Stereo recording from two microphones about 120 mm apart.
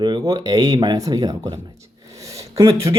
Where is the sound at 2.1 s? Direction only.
25° right (ahead or behind).